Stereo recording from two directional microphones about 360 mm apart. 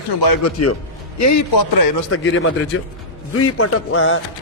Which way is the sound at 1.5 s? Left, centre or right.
Left.